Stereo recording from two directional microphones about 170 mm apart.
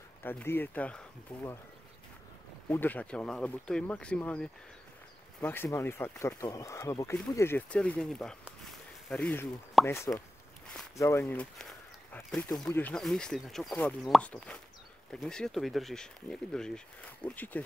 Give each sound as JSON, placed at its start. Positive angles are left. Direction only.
{"t": 0.2, "sound": "speech", "side_deg": 10}
{"t": 2.7, "sound": "speech", "side_deg": 10}